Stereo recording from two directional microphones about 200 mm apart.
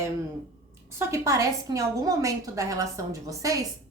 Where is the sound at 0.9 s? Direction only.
15° right (ahead or behind).